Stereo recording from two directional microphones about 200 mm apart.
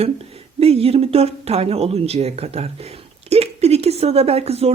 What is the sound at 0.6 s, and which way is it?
Speech, 30° right (ahead or behind).